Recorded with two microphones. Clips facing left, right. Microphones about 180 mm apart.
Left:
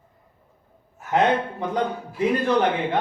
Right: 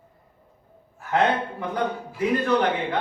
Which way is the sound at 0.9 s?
20° left (ahead or behind).